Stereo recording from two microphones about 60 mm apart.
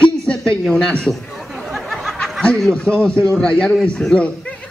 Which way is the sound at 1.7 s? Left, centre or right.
Centre.